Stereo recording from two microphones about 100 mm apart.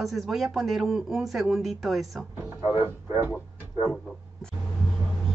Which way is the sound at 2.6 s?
25° right (ahead or behind).